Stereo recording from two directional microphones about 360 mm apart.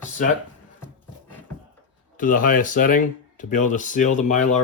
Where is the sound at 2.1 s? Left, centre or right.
Left.